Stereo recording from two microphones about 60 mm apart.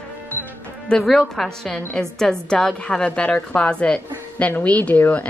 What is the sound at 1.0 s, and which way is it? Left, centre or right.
A woman's voice, centre.